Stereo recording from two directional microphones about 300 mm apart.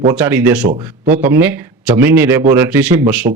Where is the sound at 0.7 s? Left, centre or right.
Right.